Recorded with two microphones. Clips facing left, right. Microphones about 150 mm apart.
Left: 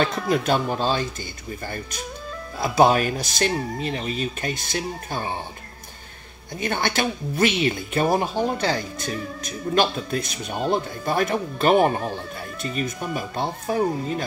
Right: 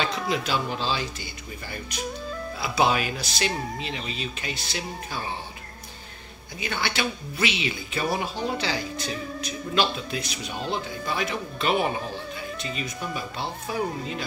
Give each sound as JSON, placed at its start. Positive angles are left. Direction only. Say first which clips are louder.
{"t": 0.0, "sound": "speech", "louder": "left 5 dB", "side_deg": 50}
{"t": 2.6, "sound": "speech", "louder": "left 6 dB", "side_deg": 45}
{"t": 6.6, "sound": "speech", "louder": "left 5 dB", "side_deg": 50}